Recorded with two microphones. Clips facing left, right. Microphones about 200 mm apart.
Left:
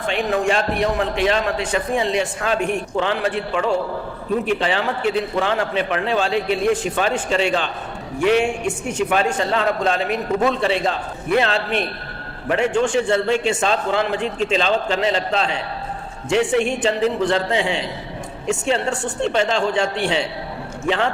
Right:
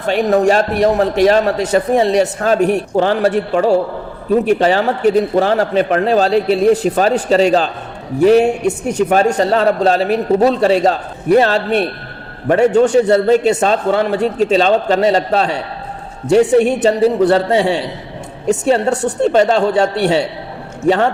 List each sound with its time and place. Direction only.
0.0 s a man's voice: 40° right (ahead or behind)